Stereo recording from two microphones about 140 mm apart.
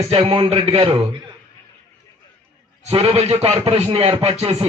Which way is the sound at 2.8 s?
45° right (ahead or behind).